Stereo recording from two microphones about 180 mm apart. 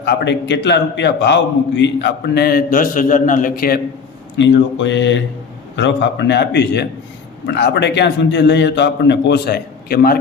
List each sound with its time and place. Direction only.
0.0 s a man's voice: 75° left (ahead or behind); by 3.8 s 55° left (ahead or behind)
4.4 s mantra: 90° left
5.7 s a man's voice: 80° left; by 10.2 s 60° left (ahead or behind)